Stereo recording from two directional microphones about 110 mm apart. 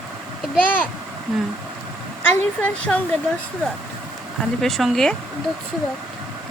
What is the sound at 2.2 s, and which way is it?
Speech, 10° left (ahead or behind).